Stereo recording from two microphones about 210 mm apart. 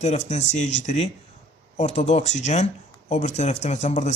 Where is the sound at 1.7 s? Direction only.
30° left (ahead or behind).